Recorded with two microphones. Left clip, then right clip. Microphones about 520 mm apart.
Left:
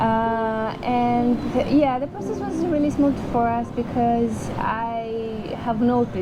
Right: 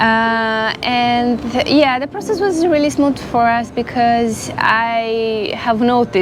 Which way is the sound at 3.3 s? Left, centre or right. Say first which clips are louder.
Right 9 dB; right.